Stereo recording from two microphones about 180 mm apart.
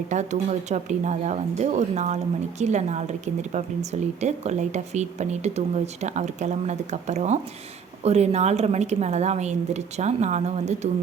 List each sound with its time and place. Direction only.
0.1 s speech: 40° right (ahead or behind)